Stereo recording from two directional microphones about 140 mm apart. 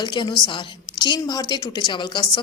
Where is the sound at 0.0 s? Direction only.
30° left (ahead or behind).